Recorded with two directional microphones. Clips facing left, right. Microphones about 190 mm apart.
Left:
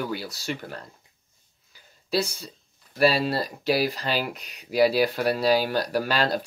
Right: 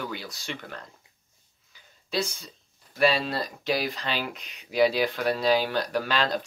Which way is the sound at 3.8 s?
40° left (ahead or behind).